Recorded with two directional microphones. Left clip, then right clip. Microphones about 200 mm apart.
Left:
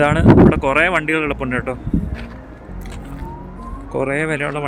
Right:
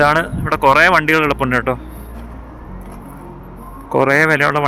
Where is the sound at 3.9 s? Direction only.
5° left (ahead or behind).